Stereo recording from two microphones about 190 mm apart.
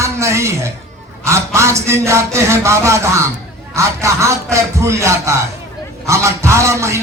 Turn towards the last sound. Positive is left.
turn(degrees=-15)  # may be behind; listen again after turning